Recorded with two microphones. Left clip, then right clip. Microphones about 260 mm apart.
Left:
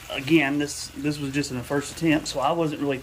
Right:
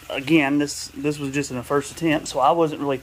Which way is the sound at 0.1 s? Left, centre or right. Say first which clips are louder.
Right 2 dB; centre.